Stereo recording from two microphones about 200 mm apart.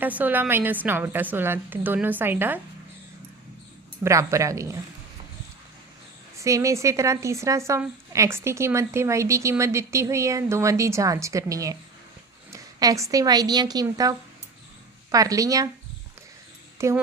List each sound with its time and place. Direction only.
0.0 s a woman's voice: 10° right (ahead or behind)
4.0 s a woman's voice: 15° right (ahead or behind)
6.4 s a woman's voice: 15° right (ahead or behind)
16.7 s speech: 15° right (ahead or behind)